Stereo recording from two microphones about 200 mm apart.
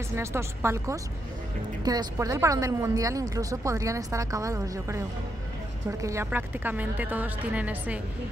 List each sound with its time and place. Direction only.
0.1 s a woman's voice: 15° right (ahead or behind)